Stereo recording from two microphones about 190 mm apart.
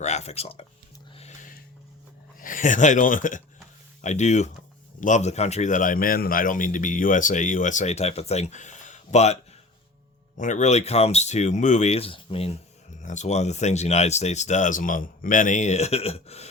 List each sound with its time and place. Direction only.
0.0 s a man's voice: 35° left (ahead or behind)
1.1 s music: 35° left (ahead or behind)
2.4 s a man's voice: 45° left (ahead or behind)